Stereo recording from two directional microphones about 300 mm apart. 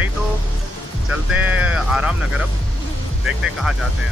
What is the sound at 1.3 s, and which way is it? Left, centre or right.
Speech, centre.